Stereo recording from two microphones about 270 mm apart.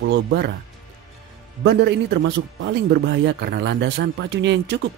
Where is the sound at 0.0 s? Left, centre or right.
Right.